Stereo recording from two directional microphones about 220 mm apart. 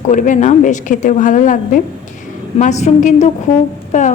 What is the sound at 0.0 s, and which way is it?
A woman's voice, 35° left (ahead or behind).